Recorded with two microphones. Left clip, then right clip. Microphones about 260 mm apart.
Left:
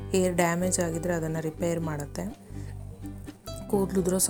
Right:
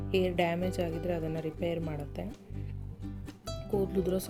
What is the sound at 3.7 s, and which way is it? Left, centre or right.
Speech, centre.